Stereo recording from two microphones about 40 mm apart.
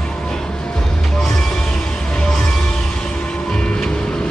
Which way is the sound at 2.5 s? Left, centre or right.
Centre.